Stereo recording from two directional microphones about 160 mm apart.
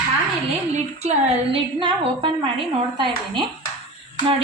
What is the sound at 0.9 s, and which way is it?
Speech, 45° right (ahead or behind).